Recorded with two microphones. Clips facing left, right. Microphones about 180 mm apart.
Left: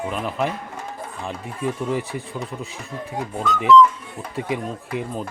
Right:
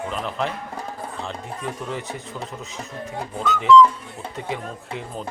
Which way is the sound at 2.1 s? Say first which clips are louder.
Left 3 dB; 40° right (ahead or behind).